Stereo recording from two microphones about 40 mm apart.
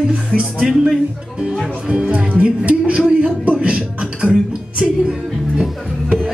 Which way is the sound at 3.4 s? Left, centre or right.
Right.